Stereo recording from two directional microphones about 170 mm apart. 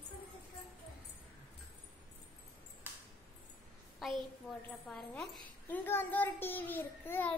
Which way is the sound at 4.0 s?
Centre (ahead or behind).